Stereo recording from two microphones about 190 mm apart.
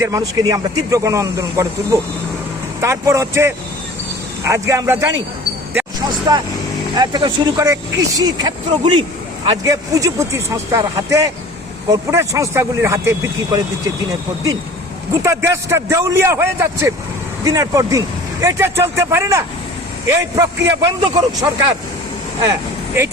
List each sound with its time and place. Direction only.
0.0 s speech: 15° right (ahead or behind)
5.7 s a sound: 20° right (ahead or behind)
6.9 s speech: 20° right (ahead or behind)
15.2 s speech: 15° right (ahead or behind)